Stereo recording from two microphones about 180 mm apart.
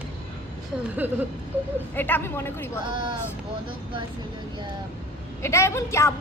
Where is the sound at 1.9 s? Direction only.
10° left (ahead or behind).